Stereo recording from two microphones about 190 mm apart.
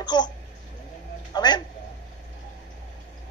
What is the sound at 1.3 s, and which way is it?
Speech, 20° left (ahead or behind).